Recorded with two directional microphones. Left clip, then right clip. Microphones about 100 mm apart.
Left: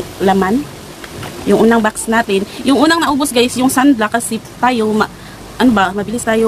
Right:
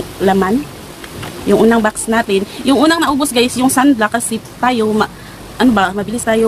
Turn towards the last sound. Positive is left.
turn(degrees=10)  # may be behind; listen again after turning